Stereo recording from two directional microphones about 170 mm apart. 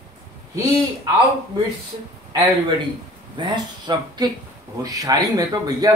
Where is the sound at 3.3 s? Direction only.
25° right (ahead or behind).